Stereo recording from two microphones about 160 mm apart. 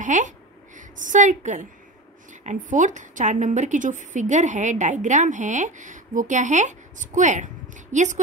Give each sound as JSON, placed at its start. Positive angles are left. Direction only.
{"t": 0.0, "sound": "a woman's voice", "side_deg": -50}